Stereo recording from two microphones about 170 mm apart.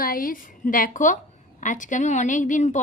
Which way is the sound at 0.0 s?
55° left (ahead or behind).